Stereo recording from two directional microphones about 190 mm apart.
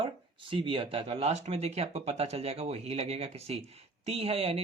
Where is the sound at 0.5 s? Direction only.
25° right (ahead or behind).